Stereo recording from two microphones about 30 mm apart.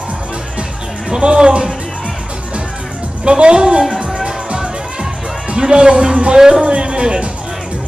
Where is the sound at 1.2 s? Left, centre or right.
Right.